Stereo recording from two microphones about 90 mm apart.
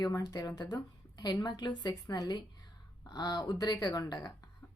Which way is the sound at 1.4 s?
55° left (ahead or behind).